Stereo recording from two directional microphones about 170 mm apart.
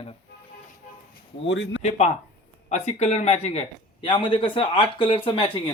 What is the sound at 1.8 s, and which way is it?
Speech, 40° left (ahead or behind).